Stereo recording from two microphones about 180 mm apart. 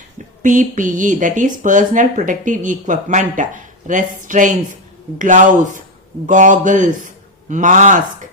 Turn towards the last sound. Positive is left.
turn(degrees=-45)  # may be behind; listen again after turning